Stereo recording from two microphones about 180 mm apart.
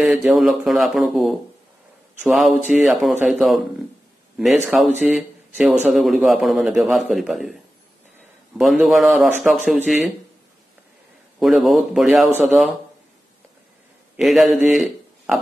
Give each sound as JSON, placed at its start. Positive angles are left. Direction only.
{"t": 0.0, "sound": "speech", "side_deg": 0}
{"t": 4.6, "sound": "speech", "side_deg": -5}
{"t": 8.5, "sound": "speech", "side_deg": 0}
{"t": 11.3, "sound": "speech", "side_deg": 0}
{"t": 14.1, "sound": "speech", "side_deg": 0}
{"t": 14.7, "sound": "a sound", "side_deg": 0}